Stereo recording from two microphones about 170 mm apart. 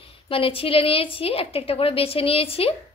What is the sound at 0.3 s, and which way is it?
A woman's voice, 30° left (ahead or behind).